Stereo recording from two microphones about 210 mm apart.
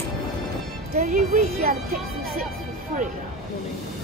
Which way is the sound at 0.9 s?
35° right (ahead or behind).